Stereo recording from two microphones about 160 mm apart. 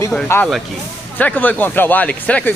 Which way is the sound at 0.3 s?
15° left (ahead or behind).